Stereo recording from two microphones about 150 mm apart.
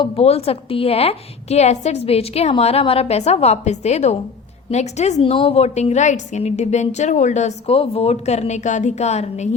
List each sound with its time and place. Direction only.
0.0 s a woman's voice: 45° left (ahead or behind)